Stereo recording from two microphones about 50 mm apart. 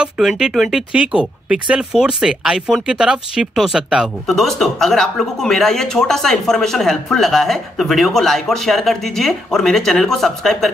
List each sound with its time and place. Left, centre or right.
0.2 s speech: centre
0.9 s speech: right
3.5 s speech: centre